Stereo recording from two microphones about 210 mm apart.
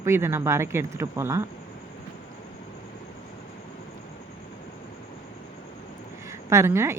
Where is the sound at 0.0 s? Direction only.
10° right (ahead or behind).